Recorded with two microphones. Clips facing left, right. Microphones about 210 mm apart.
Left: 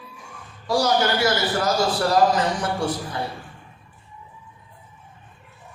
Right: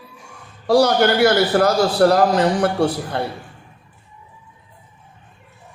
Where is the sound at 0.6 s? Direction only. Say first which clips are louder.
Right 6 dB; 60° right (ahead or behind).